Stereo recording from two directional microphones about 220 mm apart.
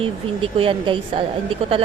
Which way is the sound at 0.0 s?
25° right (ahead or behind).